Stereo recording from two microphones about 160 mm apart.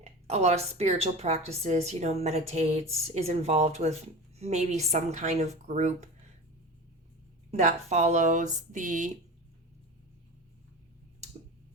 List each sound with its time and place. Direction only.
0.0 s a woman's voice: 45° right (ahead or behind)
7.6 s a woman's voice: 45° right (ahead or behind)